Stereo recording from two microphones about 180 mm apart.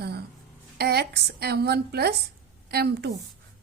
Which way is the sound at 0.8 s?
60° right (ahead or behind).